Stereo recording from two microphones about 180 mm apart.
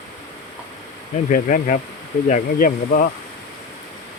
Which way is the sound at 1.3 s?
50° left (ahead or behind).